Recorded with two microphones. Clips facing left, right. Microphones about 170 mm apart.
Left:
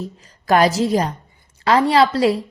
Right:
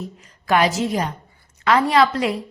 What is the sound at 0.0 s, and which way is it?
A woman's voice, 35° left (ahead or behind).